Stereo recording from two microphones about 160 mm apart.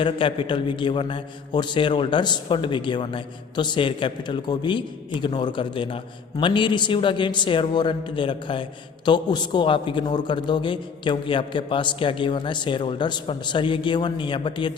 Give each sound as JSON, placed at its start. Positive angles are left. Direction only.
{"t": 0.0, "sound": "a man's voice", "side_deg": 30}